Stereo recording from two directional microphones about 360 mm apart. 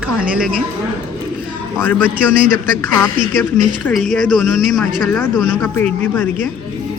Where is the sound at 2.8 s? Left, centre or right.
Centre.